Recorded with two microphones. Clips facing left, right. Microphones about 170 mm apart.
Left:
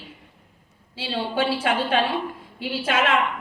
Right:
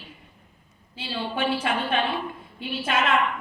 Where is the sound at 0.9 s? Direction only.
90° left.